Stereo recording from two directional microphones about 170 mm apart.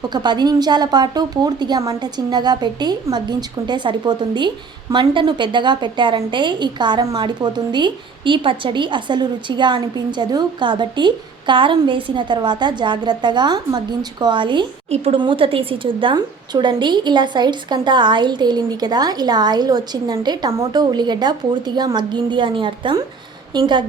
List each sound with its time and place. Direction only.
0.1 s a woman's voice: 25° right (ahead or behind)